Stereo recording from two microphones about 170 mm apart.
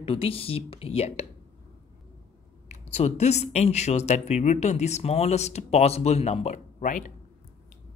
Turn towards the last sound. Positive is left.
turn(degrees=50)  # may be behind; listen again after turning